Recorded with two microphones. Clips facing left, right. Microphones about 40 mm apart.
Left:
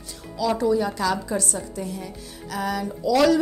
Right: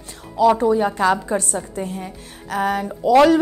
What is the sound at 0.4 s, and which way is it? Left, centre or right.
A woman's voice, right.